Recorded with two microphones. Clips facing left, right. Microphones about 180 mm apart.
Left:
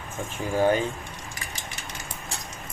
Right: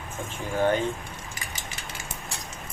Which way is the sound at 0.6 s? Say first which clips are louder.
Left 2 dB; 10° left (ahead or behind).